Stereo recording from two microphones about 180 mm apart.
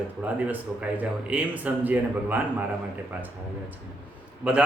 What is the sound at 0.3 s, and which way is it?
Speech, 10° right (ahead or behind).